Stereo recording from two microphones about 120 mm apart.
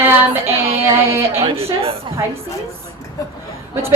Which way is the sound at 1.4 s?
55° right (ahead or behind).